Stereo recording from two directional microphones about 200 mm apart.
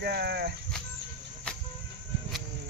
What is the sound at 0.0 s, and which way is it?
Speech, 55° right (ahead or behind).